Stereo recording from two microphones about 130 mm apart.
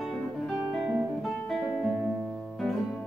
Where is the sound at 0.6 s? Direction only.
10° right (ahead or behind).